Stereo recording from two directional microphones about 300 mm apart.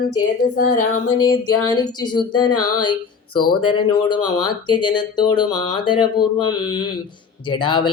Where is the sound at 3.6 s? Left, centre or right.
Centre.